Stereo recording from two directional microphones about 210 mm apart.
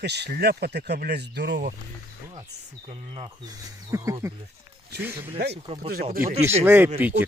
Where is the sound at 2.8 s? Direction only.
30° right (ahead or behind).